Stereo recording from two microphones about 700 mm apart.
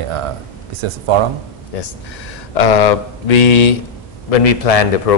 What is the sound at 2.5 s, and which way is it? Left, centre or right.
Speech, left.